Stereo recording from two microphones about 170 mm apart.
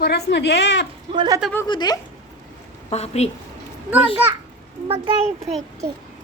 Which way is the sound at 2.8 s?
40° left (ahead or behind).